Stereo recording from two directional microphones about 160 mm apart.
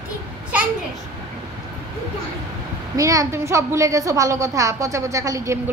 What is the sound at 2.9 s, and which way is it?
A woman's voice, 20° right (ahead or behind).